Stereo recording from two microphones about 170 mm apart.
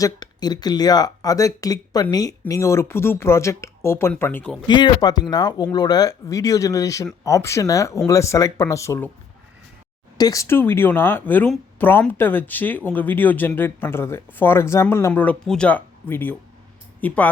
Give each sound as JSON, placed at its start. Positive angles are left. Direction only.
{"t": 0.0, "sound": "speech", "side_deg": 25}
{"t": 4.7, "sound": "speech", "side_deg": 25}
{"t": 10.2, "sound": "speech", "side_deg": 20}